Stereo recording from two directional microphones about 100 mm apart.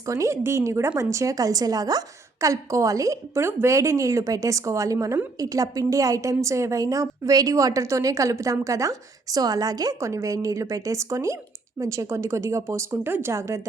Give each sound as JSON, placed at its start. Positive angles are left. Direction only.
{"t": 0.0, "sound": "a woman's voice", "side_deg": -30}